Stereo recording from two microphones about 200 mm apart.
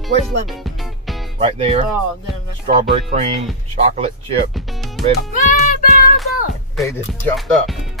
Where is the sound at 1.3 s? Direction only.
25° right (ahead or behind).